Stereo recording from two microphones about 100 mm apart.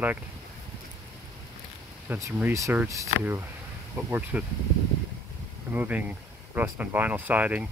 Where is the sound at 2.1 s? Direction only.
20° right (ahead or behind).